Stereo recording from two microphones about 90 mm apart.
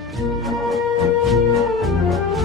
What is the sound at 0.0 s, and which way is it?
Music, centre (ahead or behind).